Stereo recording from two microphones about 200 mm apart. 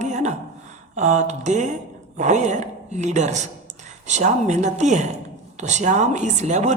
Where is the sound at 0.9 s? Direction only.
35° right (ahead or behind).